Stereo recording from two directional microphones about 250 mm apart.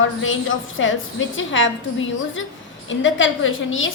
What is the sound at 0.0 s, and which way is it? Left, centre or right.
A woman's voice, left.